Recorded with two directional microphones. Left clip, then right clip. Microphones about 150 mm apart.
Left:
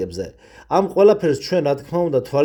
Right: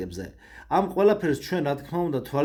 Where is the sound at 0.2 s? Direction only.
40° left (ahead or behind).